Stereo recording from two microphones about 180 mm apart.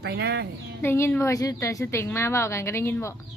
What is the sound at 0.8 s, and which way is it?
A woman's voice, 15° left (ahead or behind).